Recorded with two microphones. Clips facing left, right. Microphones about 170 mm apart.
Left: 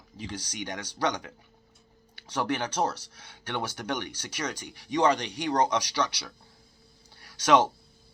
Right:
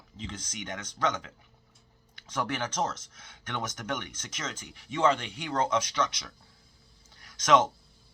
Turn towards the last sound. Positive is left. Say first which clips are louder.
# left 1 dB
turn(degrees=30)  # may be behind; listen again after turning